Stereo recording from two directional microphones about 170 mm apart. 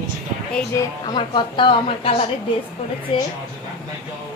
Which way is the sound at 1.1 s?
30° left (ahead or behind).